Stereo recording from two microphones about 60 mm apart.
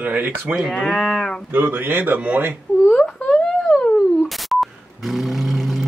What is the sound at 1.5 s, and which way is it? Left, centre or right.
A man's voice, right.